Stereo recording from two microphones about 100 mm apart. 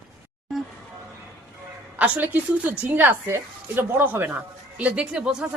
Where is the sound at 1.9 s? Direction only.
15° right (ahead or behind).